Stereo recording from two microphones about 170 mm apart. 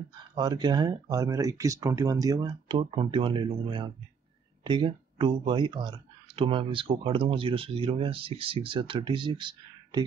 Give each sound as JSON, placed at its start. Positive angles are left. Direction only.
{"t": 0.3, "sound": "speech", "side_deg": -25}